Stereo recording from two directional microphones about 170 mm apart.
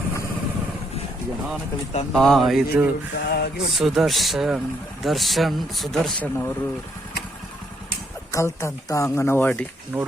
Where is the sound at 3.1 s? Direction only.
70° left (ahead or behind).